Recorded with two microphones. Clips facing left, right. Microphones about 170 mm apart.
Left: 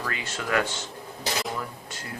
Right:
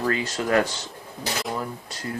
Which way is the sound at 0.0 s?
35° right (ahead or behind).